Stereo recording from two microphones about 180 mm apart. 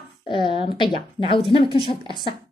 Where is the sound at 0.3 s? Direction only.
30° left (ahead or behind).